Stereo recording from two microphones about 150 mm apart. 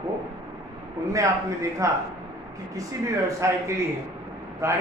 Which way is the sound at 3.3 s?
20° right (ahead or behind).